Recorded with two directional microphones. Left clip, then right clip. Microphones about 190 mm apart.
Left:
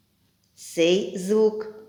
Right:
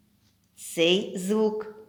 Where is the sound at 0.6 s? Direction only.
20° right (ahead or behind).